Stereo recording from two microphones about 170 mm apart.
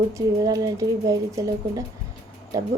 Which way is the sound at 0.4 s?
20° right (ahead or behind).